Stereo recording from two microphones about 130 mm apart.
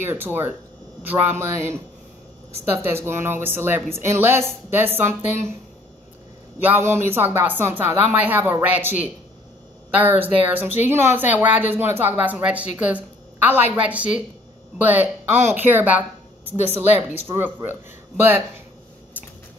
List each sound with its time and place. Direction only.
0.0 s speech: 15° right (ahead or behind)
2.8 s speech: 20° right (ahead or behind)
6.6 s speech: 15° right (ahead or behind)
17.3 s speech: 30° right (ahead or behind)